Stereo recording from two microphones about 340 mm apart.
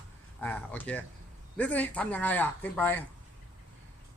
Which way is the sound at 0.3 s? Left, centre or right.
Centre.